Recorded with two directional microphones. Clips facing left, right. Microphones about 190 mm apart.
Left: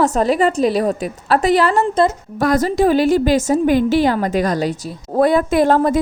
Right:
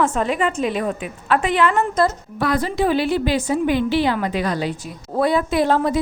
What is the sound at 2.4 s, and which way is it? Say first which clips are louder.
A woman's voice: left 5 dB; 45° left (ahead or behind).